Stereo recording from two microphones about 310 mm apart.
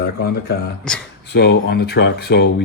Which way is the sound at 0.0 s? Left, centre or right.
Left.